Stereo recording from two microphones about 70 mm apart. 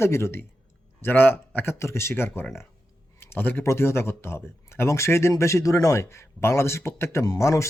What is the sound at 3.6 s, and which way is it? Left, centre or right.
Speech, left.